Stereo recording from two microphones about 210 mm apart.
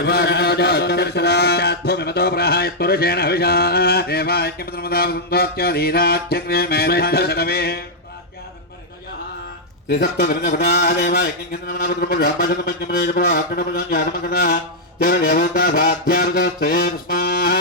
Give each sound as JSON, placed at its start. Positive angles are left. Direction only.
{"t": 0.0, "sound": "mantra", "side_deg": 55}
{"t": 9.9, "sound": "mantra", "side_deg": 50}